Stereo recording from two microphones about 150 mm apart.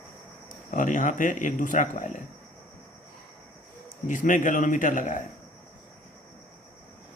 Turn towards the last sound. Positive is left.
turn(degrees=60)  # may be behind; listen again after turning